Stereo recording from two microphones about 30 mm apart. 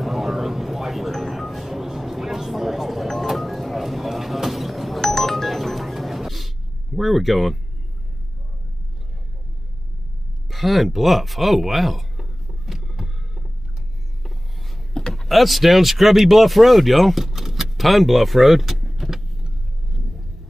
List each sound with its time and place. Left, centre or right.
0.0 s a sound: centre
3.3 s music: centre
5.0 s music: centre
7.0 s speech: centre
10.5 s speech: centre
12.6 s a sound: centre
15.0 s a sound: left
15.2 s speech: centre
17.2 s speech: centre
19.0 s vehicle: centre